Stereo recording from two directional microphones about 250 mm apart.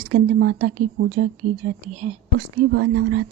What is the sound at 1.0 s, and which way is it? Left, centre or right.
Speech, right.